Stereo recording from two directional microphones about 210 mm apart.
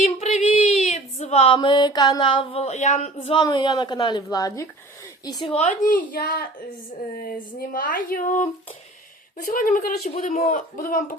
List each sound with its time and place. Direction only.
0.0 s child singing: 30° left (ahead or behind)
0.9 s a sound: 30° left (ahead or behind); by 4.7 s 15° left (ahead or behind)
5.2 s speech: 20° left (ahead or behind)
5.9 s speech: 45° left (ahead or behind)
7.7 s speech: 40° left (ahead or behind)